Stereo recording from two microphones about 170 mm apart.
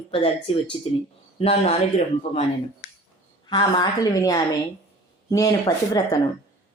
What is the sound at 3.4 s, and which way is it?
A woman's voice, 25° left (ahead or behind).